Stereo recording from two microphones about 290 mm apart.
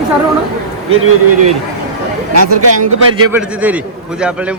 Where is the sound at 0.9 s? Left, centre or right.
Right.